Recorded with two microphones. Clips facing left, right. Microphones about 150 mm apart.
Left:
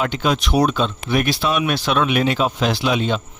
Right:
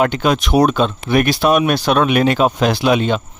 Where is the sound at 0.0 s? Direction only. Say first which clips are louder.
Right 5 dB; 55° right (ahead or behind).